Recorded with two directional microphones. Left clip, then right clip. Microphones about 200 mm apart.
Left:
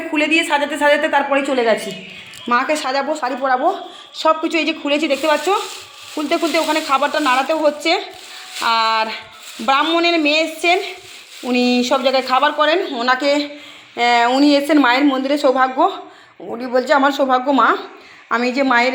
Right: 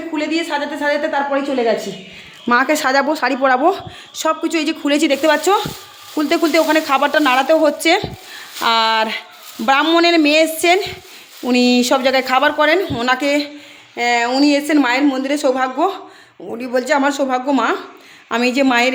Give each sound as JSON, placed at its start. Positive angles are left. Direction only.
{"t": 0.1, "sound": "speech", "side_deg": -15}
{"t": 2.5, "sound": "speech", "side_deg": -40}
{"t": 4.2, "sound": "speech", "side_deg": -25}
{"t": 13.9, "sound": "speech", "side_deg": -10}